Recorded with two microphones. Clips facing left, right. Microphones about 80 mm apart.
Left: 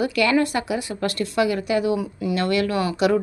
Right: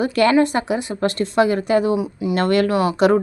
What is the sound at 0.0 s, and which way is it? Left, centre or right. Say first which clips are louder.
A woman's voice: right 4 dB; right.